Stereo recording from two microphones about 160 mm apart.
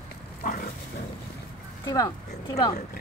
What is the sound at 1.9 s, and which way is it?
Speech, 20° left (ahead or behind).